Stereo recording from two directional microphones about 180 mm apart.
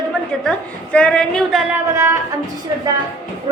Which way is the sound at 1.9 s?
15° right (ahead or behind).